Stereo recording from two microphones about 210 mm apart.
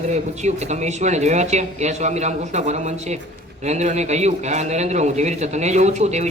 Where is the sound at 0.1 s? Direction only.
35° right (ahead or behind).